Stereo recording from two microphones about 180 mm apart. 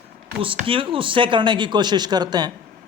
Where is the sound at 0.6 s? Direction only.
30° right (ahead or behind).